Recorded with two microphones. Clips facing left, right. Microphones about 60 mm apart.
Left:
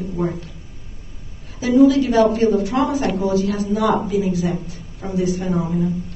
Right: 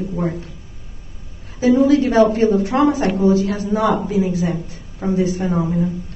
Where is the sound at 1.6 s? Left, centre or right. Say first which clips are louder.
Even; right.